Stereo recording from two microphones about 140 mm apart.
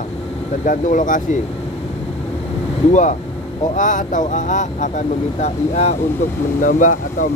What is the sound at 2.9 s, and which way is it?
Speech, 60° left (ahead or behind).